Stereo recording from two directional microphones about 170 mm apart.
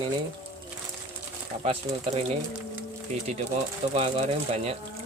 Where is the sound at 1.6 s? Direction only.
35° right (ahead or behind).